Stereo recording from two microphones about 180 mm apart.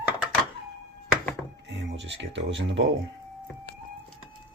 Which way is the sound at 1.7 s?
80° right.